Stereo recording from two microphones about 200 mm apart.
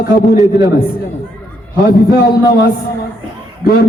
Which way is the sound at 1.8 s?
50° left (ahead or behind).